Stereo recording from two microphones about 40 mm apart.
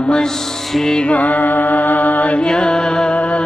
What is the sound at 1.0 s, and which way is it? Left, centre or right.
Music, left.